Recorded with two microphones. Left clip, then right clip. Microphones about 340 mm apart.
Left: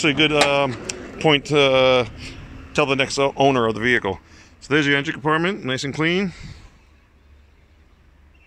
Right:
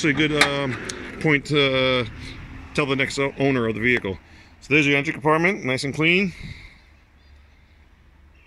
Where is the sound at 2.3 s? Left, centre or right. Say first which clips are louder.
Left 1 dB; centre.